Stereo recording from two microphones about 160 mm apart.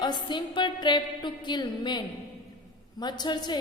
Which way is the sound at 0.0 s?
30° left (ahead or behind).